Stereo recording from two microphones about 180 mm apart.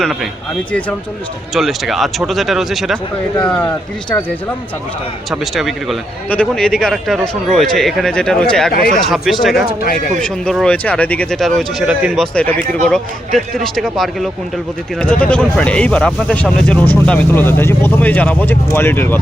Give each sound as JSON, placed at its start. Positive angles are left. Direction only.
{"t": 0.0, "sound": "speech", "side_deg": 0}
{"t": 1.5, "sound": "speech", "side_deg": 0}
{"t": 5.3, "sound": "speech", "side_deg": 0}
{"t": 9.6, "sound": "speech", "side_deg": 50}
{"t": 10.2, "sound": "speech", "side_deg": 5}